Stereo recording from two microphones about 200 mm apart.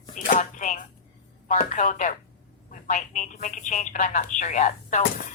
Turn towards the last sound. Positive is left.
turn(degrees=35)  # may be behind; listen again after turning